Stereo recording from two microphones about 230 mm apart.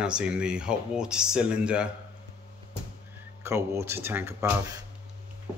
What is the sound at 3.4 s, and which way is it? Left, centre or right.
Speech, centre.